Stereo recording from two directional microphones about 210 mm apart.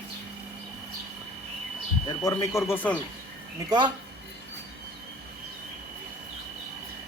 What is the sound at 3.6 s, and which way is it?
Speech, 20° right (ahead or behind).